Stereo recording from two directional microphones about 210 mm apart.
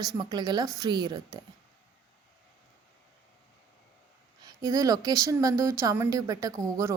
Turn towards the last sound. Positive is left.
turn(degrees=-15)  # may be behind; listen again after turning